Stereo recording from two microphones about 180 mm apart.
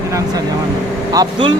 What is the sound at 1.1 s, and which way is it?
Speech, 25° right (ahead or behind).